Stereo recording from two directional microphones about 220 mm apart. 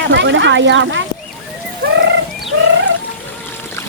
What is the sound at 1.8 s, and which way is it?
Fowl, 50° right (ahead or behind).